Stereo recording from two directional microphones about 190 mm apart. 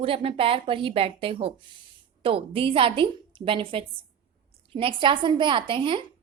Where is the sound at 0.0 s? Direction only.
30° right (ahead or behind).